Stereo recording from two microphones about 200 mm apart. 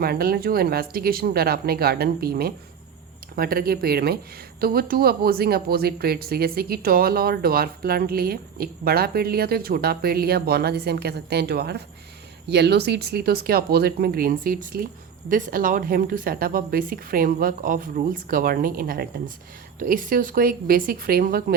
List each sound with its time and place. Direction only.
0.0 s speech: 50° right (ahead or behind)